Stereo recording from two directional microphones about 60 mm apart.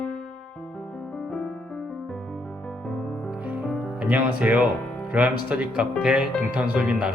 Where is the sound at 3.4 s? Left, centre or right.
Right.